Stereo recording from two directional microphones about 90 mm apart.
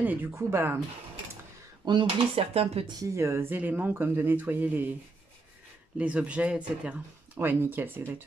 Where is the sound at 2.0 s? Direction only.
90° right.